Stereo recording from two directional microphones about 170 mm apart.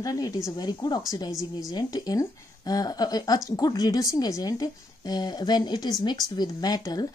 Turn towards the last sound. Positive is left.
turn(degrees=20)  # may be behind; listen again after turning